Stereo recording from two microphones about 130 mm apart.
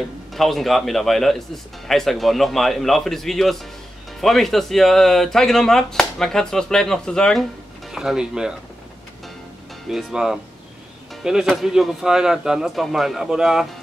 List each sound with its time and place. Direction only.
0.3 s speech: centre (ahead or behind)
9.8 s speech: 5° right (ahead or behind)